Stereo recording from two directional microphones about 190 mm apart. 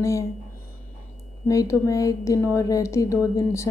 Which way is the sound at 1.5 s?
15° left (ahead or behind).